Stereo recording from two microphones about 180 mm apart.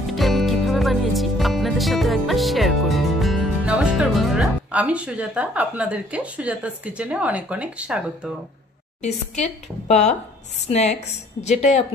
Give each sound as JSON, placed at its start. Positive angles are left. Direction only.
{"t": 0.0, "sound": "music", "side_deg": 0}
{"t": 9.8, "sound": "speech", "side_deg": 40}